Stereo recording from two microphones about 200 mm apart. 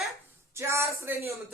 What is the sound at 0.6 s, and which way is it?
Speech, 15° right (ahead or behind).